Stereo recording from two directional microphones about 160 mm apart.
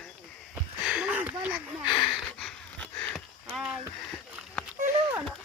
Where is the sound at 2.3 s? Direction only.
5° left (ahead or behind).